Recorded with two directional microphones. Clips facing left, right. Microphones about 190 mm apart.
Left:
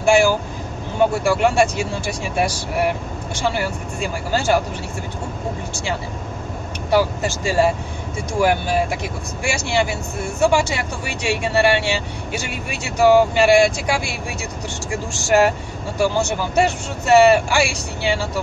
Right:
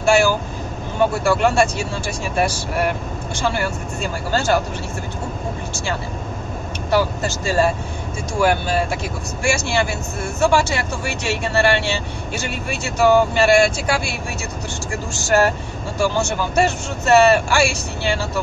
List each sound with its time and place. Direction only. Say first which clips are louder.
0.0 s speech: left 1 dB; 15° left (ahead or behind)
6.9 s speech: left 1 dB; 15° left (ahead or behind)